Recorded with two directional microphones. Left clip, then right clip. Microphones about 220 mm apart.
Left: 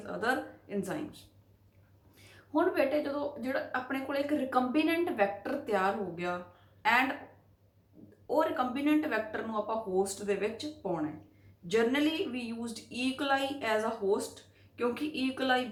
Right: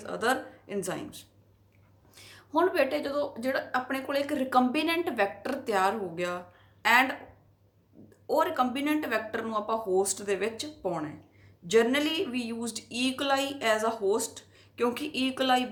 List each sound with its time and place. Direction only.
0.0 s speech: 50° right (ahead or behind)
2.1 s speech: 50° right (ahead or behind)
8.3 s speech: 50° right (ahead or behind)